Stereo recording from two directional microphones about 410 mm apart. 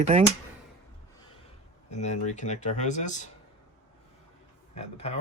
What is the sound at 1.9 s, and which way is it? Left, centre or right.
Speech, centre.